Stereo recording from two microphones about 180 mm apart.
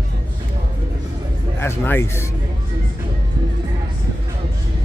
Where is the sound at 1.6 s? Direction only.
15° left (ahead or behind).